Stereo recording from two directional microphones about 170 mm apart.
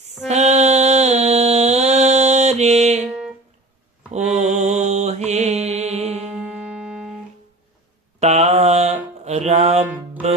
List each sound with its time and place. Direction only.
0.3 s music: 40° right (ahead or behind)
3.1 s music: 5° right (ahead or behind)
4.4 s mantra: 45° right (ahead or behind)
6.7 s music: 5° right (ahead or behind)
8.2 s mantra: 40° right (ahead or behind)
9.2 s music: 40° right (ahead or behind)